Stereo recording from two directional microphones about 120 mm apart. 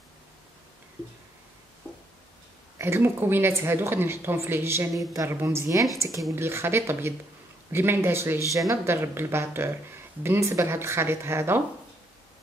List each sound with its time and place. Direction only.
2.8 s speech: 20° right (ahead or behind)